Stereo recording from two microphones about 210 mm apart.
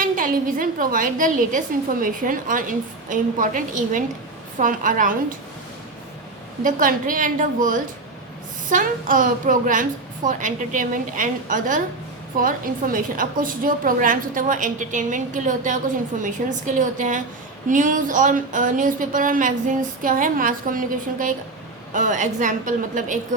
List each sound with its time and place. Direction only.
0.0 s a woman's voice: 40° right (ahead or behind)
6.6 s a woman's voice: 40° right (ahead or behind)